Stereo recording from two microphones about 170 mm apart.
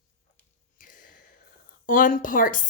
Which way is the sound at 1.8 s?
55° left (ahead or behind).